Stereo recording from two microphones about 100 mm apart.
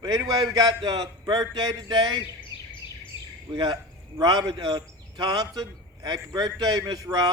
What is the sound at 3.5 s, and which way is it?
A man's voice, 45° right (ahead or behind).